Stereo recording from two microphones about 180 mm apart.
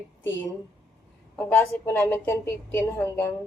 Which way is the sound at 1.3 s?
10° left (ahead or behind).